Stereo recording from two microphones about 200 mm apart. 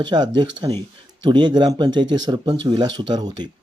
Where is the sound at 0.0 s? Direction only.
20° right (ahead or behind).